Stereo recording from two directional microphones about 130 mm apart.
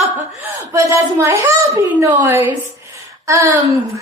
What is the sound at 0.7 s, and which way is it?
A woman's voice, 25° right (ahead or behind).